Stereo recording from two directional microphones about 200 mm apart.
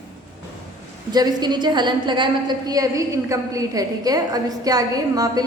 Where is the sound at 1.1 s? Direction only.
20° right (ahead or behind).